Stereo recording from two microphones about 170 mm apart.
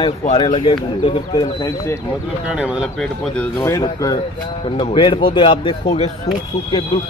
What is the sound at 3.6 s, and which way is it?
A man's voice, 20° left (ahead or behind).